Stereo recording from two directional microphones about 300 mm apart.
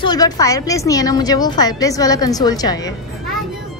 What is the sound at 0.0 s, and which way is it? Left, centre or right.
A woman's voice, centre.